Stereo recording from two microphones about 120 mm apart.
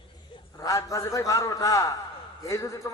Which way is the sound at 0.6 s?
25° left (ahead or behind).